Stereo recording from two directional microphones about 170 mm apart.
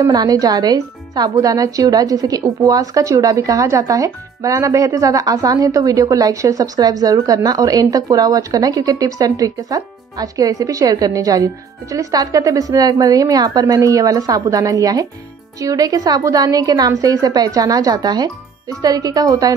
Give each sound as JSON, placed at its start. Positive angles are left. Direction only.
{"t": 0.0, "sound": "speech", "side_deg": -20}